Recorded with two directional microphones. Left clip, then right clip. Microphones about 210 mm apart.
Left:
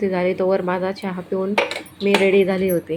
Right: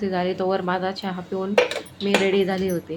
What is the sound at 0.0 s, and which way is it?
A woman's voice, 5° left (ahead or behind).